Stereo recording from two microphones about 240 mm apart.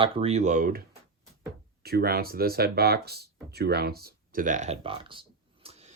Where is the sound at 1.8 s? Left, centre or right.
Right.